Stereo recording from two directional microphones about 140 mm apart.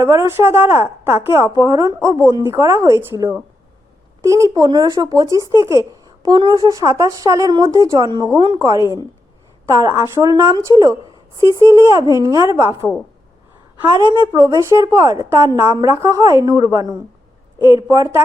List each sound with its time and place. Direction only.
0.0 s a woman's voice: 20° right (ahead or behind)
4.2 s a woman's voice: 25° right (ahead or behind)
14.1 s a woman's voice: 30° right (ahead or behind)
17.7 s a woman's voice: 20° right (ahead or behind)